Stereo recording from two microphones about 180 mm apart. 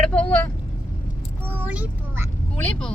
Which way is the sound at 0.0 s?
5° left (ahead or behind).